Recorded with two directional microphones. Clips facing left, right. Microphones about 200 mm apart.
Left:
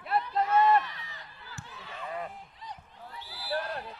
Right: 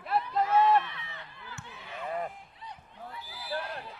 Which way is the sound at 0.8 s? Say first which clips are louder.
Right 1 dB; 40° left (ahead or behind).